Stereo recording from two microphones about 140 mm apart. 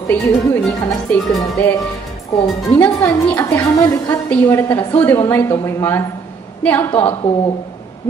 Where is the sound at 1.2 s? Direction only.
Centre (ahead or behind).